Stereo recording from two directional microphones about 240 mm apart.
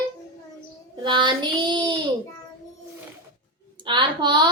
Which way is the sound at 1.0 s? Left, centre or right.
Centre.